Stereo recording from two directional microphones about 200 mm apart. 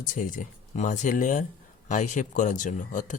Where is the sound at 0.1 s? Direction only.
40° left (ahead or behind).